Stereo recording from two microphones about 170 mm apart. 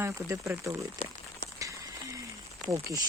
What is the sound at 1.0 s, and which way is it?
Speech, 35° left (ahead or behind).